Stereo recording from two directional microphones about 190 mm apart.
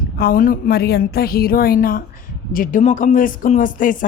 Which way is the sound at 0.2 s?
50° left (ahead or behind).